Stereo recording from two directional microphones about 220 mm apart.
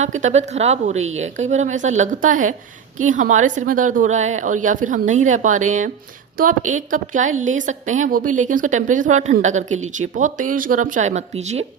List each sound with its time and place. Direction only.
0.0 s a woman's voice: 35° right (ahead or behind)